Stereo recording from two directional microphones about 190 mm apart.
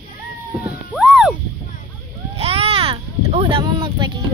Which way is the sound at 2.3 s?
30° right (ahead or behind).